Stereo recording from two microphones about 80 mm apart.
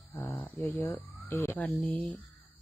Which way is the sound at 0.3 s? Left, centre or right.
Left.